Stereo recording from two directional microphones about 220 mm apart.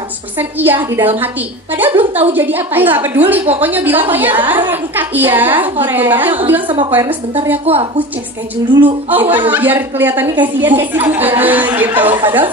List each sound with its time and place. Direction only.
0.4 s a woman's voice: 10° right (ahead or behind)
8.6 s a woman's voice: 20° right (ahead or behind)
9.1 s a woman's voice: 10° right (ahead or behind)